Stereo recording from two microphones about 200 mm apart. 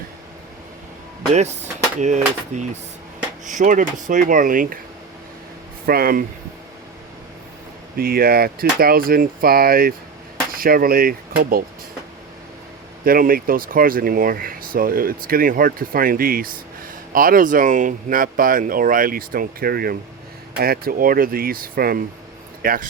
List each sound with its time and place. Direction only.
1.3 s speech: 35° right (ahead or behind)
5.8 s speech: 50° right (ahead or behind)
7.9 s speech: 50° right (ahead or behind)
13.1 s speech: 45° right (ahead or behind)